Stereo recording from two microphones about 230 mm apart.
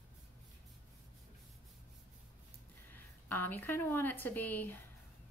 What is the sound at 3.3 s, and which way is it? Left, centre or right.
Speech, centre.